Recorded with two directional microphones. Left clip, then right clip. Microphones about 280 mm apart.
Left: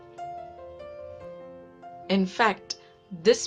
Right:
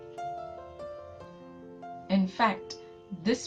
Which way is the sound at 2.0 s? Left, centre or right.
Left.